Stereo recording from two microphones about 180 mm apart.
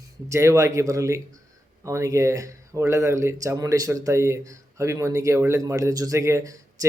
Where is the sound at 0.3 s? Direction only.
15° right (ahead or behind).